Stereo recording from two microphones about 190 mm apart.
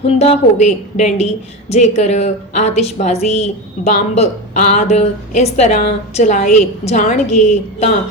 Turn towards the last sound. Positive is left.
turn(degrees=35)  # may be behind; listen again after turning